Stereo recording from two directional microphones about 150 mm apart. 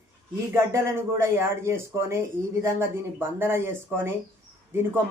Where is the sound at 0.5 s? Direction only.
15° right (ahead or behind).